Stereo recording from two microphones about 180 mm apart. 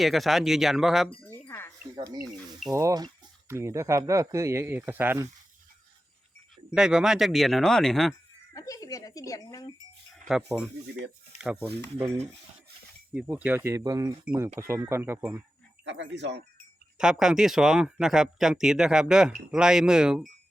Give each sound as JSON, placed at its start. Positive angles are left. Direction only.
{"t": 0.0, "sound": "speech", "side_deg": 0}
{"t": 1.2, "sound": "wind chime", "side_deg": 10}
{"t": 2.0, "sound": "speech", "side_deg": -15}
{"t": 6.7, "sound": "speech", "side_deg": -5}
{"t": 8.5, "sound": "speech", "side_deg": 20}
{"t": 10.5, "sound": "speech", "side_deg": 0}
{"t": 11.5, "sound": "speech", "side_deg": -30}
{"t": 13.1, "sound": "speech", "side_deg": -10}
{"t": 15.8, "sound": "speech", "side_deg": -85}
{"t": 17.0, "sound": "speech", "side_deg": -5}